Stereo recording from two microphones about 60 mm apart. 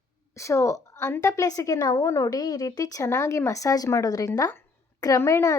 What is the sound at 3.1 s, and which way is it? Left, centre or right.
Speech, left.